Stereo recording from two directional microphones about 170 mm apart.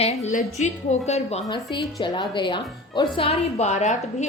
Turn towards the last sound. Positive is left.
turn(degrees=45)  # may be behind; listen again after turning